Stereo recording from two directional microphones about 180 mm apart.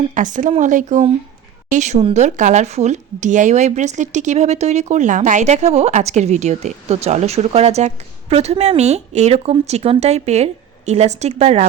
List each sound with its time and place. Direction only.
0.1 s speech: 45° right (ahead or behind)